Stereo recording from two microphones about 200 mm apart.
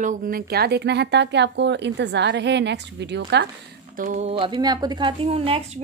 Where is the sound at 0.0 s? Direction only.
50° right (ahead or behind).